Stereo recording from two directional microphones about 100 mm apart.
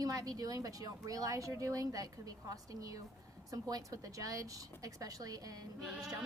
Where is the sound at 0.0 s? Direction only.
35° right (ahead or behind).